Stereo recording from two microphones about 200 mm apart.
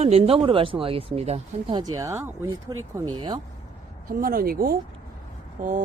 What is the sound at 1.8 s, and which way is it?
Speech, 15° right (ahead or behind).